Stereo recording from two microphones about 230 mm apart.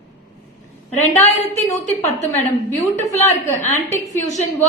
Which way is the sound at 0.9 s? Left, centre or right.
Left.